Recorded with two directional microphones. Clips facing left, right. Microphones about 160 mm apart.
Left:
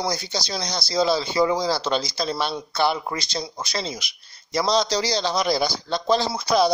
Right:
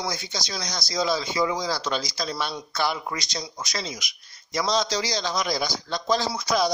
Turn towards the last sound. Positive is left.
turn(degrees=30)  # may be behind; listen again after turning